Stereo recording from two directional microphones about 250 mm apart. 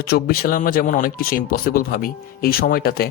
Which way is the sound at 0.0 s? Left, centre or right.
Left.